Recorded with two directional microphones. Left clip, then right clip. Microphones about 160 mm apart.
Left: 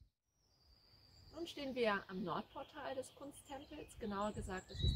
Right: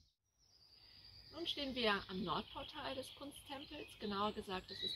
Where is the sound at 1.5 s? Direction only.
40° left (ahead or behind).